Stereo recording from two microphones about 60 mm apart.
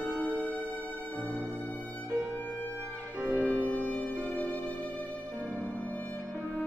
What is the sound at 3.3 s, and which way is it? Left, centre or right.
Music, right.